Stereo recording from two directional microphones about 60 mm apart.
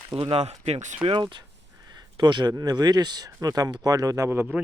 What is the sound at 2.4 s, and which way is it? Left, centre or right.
Speech, right.